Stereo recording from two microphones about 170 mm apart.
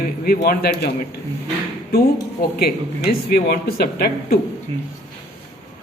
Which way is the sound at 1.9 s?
65° left (ahead or behind).